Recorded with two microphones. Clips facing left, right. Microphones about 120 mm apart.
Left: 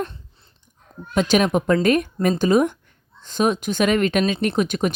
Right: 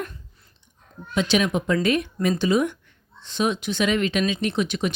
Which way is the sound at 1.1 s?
45° left (ahead or behind).